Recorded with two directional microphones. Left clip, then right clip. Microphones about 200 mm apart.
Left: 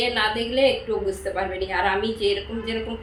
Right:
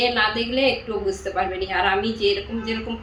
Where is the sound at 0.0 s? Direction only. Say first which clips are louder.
Right 2 dB; 5° left (ahead or behind).